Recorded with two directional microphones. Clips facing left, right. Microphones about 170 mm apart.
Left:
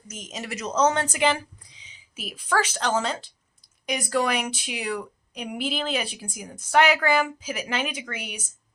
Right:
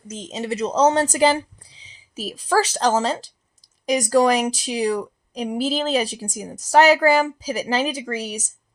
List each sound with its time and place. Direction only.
0.1 s a woman's voice: 30° right (ahead or behind)